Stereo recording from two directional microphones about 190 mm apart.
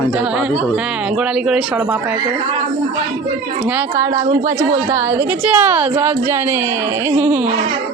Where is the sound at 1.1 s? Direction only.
5° right (ahead or behind).